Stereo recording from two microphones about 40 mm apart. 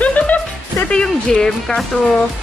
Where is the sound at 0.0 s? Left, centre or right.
Left.